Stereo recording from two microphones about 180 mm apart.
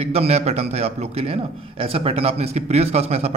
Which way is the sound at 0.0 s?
35° right (ahead or behind).